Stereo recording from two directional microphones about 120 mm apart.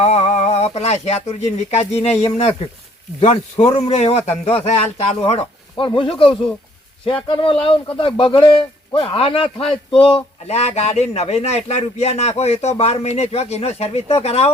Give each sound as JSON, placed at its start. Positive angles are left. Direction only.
{"t": 0.0, "sound": "speech", "side_deg": 60}